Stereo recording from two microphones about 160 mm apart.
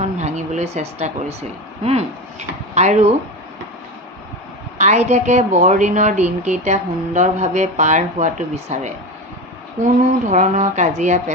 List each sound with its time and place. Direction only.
0.2 s a woman's voice: 45° right (ahead or behind)
4.8 s a woman's voice: 45° right (ahead or behind)